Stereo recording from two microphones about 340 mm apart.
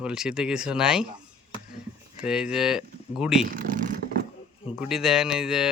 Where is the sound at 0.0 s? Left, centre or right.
Centre.